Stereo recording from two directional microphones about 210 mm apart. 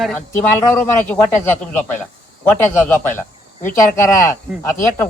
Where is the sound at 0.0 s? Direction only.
10° left (ahead or behind).